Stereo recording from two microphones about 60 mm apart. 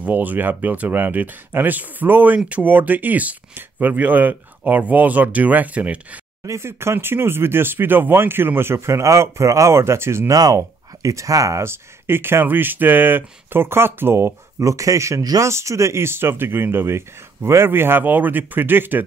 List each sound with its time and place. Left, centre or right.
0.0 s speech: right
6.4 s speech: right
10.3 s speech: right
11.0 s speech: right
11.6 s speech: right
14.6 s speech: right